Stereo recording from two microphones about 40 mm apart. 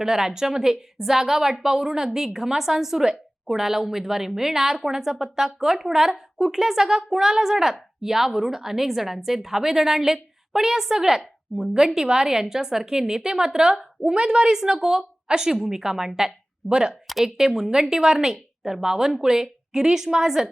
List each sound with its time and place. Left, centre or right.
0.0 s a woman's voice: centre
16.6 s speech: right
16.9 s a woman's voice: centre
17.3 s a woman's voice: centre